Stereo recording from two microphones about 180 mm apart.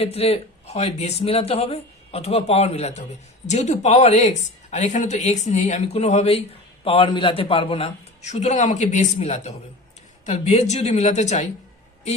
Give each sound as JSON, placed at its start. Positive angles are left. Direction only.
{"t": 0.0, "sound": "speech", "side_deg": 35}